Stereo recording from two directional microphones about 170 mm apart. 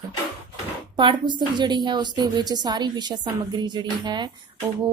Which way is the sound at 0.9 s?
30° right (ahead or behind).